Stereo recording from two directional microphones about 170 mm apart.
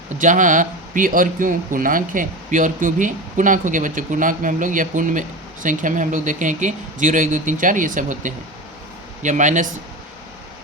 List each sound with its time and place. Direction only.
0.2 s speech: 50° right (ahead or behind)